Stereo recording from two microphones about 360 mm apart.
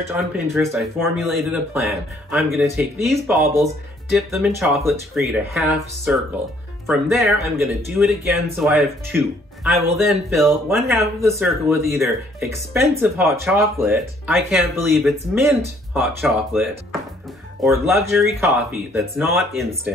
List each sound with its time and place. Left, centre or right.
0.1 s speech: centre